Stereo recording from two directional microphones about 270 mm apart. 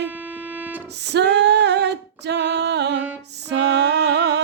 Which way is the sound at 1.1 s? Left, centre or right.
Right.